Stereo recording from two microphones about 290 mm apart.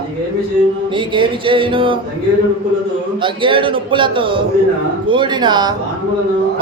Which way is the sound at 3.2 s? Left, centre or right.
Centre.